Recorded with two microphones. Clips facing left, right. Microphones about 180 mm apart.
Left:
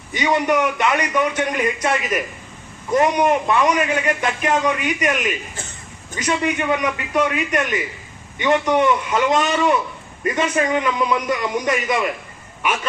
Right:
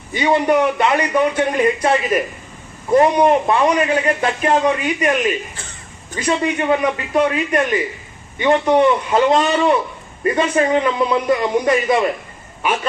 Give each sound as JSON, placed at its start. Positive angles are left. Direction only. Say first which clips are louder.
{"t": 0.1, "sound": "a man's voice", "louder": "right 3 dB", "side_deg": -30}